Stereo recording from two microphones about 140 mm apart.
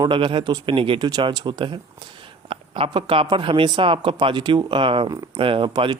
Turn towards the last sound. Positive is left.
turn(degrees=-35)  # may be behind; listen again after turning